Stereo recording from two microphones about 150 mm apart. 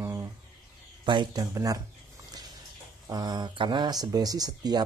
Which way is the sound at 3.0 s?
25° right (ahead or behind).